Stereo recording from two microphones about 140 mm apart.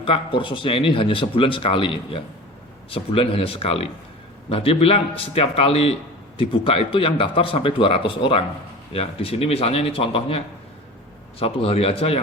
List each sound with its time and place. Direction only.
0.0 s a man's voice: 40° left (ahead or behind)